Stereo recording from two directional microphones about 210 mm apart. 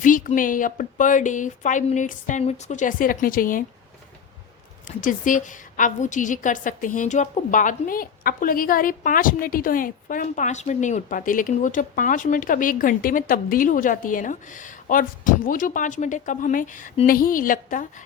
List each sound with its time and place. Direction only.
0.0 s a woman's voice: 40° left (ahead or behind)
4.9 s a woman's voice: 40° left (ahead or behind)